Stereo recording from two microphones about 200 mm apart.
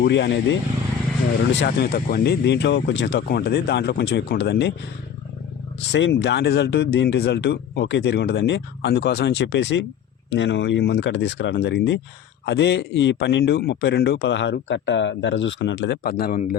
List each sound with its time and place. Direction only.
0.0 s a man's voice: 60° left (ahead or behind)
5.9 s a man's voice: 60° left (ahead or behind); by 16.6 s 45° left (ahead or behind)